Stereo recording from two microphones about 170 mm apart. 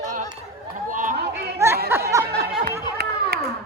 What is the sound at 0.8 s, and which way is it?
Chatter, 50° right (ahead or behind).